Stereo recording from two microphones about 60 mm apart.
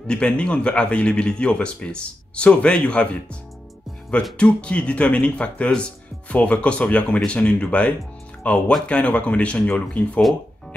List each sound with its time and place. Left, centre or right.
0.0 s speech: centre
4.4 s speech: centre